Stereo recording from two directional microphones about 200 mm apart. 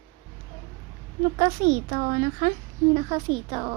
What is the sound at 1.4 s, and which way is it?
A woman's voice, 40° right (ahead or behind).